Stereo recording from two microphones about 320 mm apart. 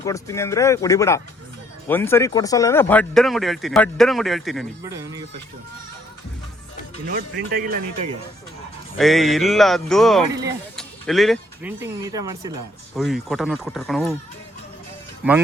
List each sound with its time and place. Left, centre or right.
0.0 s speech: centre
7.0 s speech: right
9.0 s speech: centre